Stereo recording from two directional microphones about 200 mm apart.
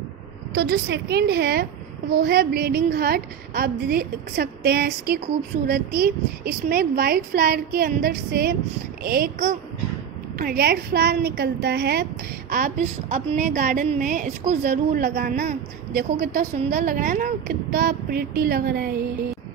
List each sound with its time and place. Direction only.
0.6 s a woman's voice: 55° right (ahead or behind)